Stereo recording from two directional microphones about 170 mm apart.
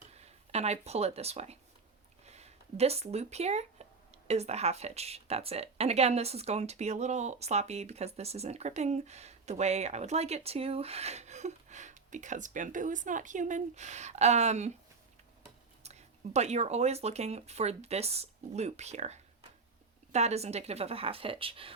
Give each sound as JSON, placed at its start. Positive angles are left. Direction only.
{"t": 0.1, "sound": "speech", "side_deg": -40}
{"t": 15.8, "sound": "speech", "side_deg": -40}